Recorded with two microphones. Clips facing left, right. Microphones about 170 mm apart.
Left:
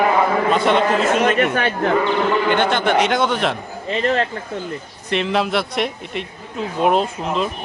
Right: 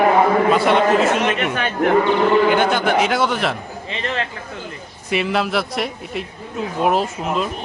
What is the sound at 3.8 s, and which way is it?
Speech, 40° left (ahead or behind).